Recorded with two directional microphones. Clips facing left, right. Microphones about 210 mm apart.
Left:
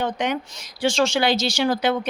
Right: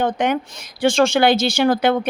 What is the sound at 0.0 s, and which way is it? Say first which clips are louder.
Speech: right 5 dB; 50° right (ahead or behind).